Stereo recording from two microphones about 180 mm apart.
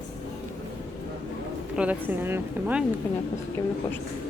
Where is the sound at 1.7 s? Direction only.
5° right (ahead or behind).